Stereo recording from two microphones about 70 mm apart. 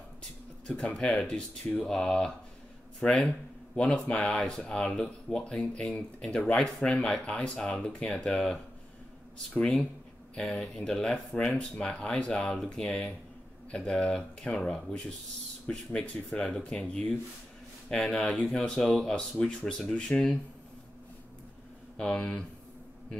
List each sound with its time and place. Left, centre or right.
0.7 s speech: centre
9.6 s speech: centre
21.9 s speech: centre